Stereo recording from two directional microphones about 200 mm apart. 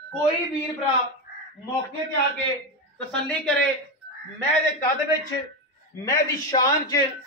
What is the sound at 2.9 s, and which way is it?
Speech, 5° left (ahead or behind).